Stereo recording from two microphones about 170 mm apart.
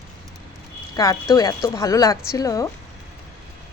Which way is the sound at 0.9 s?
20° left (ahead or behind).